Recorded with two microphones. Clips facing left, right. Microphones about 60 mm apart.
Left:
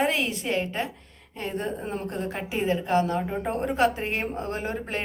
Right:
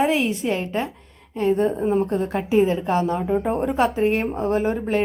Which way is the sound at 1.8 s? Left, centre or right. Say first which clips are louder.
Right 12 dB; centre.